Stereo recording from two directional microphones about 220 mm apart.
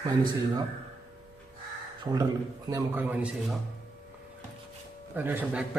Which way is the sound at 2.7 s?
10° right (ahead or behind).